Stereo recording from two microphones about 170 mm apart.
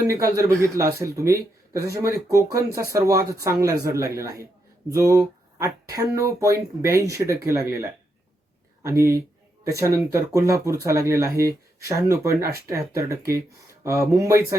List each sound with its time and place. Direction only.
0.1 s speech: 20° right (ahead or behind)